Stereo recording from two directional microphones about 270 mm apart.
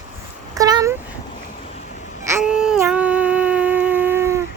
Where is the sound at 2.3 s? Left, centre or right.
Centre.